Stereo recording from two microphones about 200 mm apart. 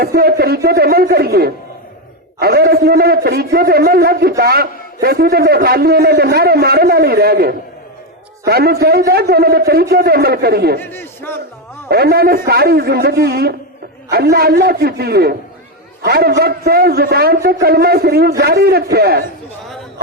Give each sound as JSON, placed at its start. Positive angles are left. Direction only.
{"t": 0.0, "sound": "a man's voice", "side_deg": -50}
{"t": 10.8, "sound": "a man's voice", "side_deg": 10}
{"t": 11.9, "sound": "a man's voice", "side_deg": -50}